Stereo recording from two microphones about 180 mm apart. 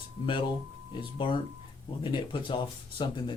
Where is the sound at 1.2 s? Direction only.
25° left (ahead or behind).